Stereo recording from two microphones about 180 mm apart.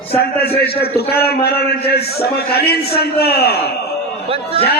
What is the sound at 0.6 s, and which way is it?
A man's voice, 60° left (ahead or behind).